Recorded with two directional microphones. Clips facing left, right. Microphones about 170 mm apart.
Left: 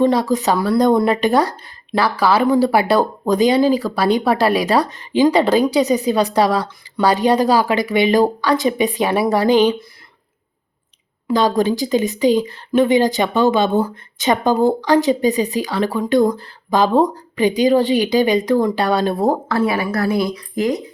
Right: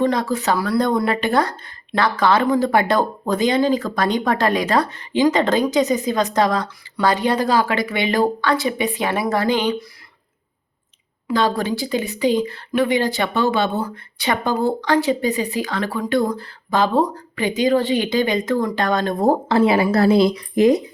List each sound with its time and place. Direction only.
0.0 s speech: 15° left (ahead or behind)
11.3 s speech: 15° left (ahead or behind)
19.5 s speech: 25° right (ahead or behind)